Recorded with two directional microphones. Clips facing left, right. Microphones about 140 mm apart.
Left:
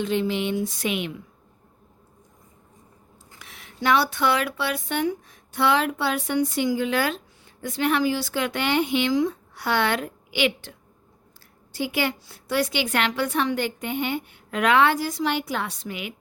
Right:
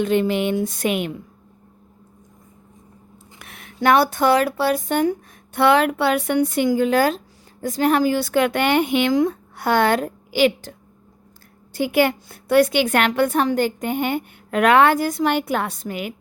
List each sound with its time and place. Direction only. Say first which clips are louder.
0.0 s a woman's voice: right 5 dB; 55° right (ahead or behind)
3.3 s speech: right 5 dB; 55° right (ahead or behind)
5.5 s a woman's voice: right 6 dB; 60° right (ahead or behind); by 10.8 s 40° right (ahead or behind)
11.7 s a woman's voice: right 8 dB; 55° right (ahead or behind)